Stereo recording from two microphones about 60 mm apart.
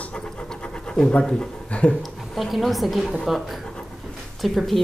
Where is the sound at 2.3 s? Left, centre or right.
Centre.